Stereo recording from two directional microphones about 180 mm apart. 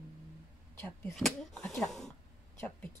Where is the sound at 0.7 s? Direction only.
10° left (ahead or behind).